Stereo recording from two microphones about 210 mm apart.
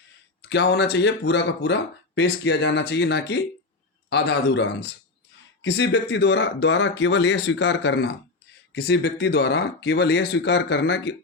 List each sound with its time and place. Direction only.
0.4 s speech: 55° left (ahead or behind)